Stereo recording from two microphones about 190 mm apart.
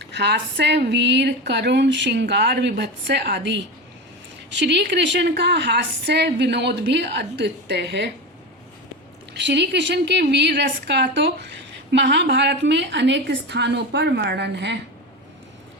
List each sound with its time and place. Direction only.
0.0 s a woman's voice: 65° right (ahead or behind)
9.3 s a woman's voice: 65° right (ahead or behind)